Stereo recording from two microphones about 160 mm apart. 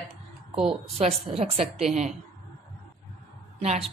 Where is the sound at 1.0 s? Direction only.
40° right (ahead or behind).